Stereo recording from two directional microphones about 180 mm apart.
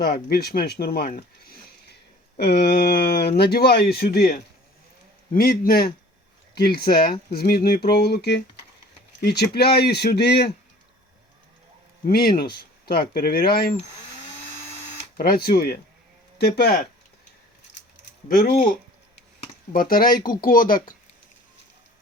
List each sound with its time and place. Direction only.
0.0 s speech: 60° left (ahead or behind)
12.0 s speech: 55° left (ahead or behind)
15.2 s speech: 55° left (ahead or behind)
18.3 s speech: 50° left (ahead or behind)
19.7 s speech: 55° left (ahead or behind)